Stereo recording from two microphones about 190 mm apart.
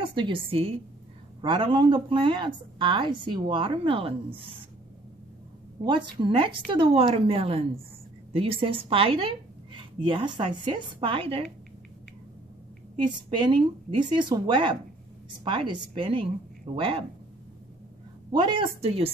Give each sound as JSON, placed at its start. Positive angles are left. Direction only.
{"t": 0.0, "sound": "a woman's voice", "side_deg": -25}
{"t": 5.9, "sound": "a woman's voice", "side_deg": -25}
{"t": 13.4, "sound": "a woman's voice", "side_deg": -25}
{"t": 18.3, "sound": "a woman's voice", "side_deg": -25}